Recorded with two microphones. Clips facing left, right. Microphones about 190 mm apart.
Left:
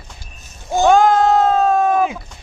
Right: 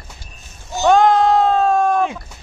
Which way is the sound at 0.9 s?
Centre (ahead or behind).